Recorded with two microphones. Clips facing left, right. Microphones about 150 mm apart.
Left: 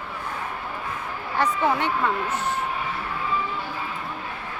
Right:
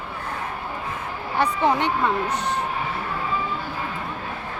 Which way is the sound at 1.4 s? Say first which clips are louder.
Right 2 dB; 20° right (ahead or behind).